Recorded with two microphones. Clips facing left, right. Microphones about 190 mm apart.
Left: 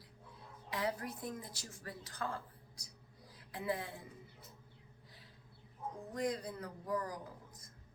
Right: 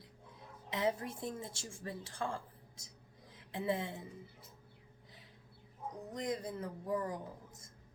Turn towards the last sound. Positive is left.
turn(degrees=-25)  # may be behind; listen again after turning